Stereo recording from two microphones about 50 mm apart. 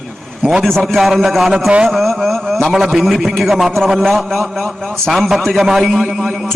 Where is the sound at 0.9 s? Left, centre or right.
Centre.